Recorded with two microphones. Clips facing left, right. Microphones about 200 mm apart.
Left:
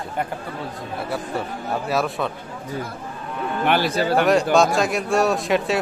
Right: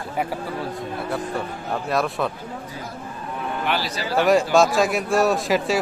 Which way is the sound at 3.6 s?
55° left (ahead or behind).